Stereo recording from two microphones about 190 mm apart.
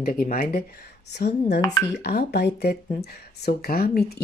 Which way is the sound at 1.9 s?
55° left (ahead or behind).